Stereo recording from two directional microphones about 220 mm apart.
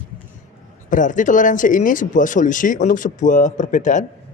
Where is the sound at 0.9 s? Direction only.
35° left (ahead or behind).